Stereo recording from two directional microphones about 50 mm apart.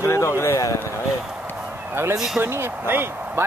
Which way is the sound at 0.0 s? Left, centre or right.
Left.